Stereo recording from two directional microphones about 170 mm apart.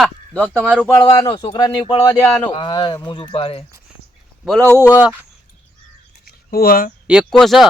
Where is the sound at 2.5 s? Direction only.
30° left (ahead or behind).